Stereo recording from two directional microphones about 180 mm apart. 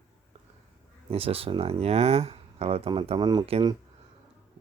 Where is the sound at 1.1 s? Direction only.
30° right (ahead or behind).